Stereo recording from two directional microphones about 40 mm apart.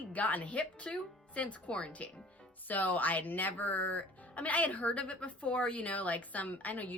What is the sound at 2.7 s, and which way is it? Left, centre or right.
Speech, left.